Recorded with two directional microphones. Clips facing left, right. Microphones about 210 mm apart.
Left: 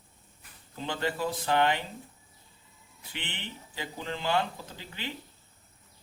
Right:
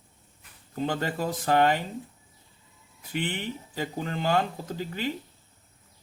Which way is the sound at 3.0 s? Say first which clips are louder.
Right 10 dB; 45° right (ahead or behind).